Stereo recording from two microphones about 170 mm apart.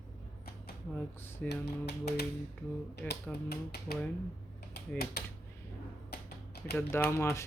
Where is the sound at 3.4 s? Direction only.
65° left (ahead or behind).